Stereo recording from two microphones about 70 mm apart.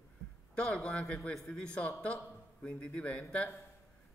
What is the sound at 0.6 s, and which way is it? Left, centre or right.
A man's voice, centre.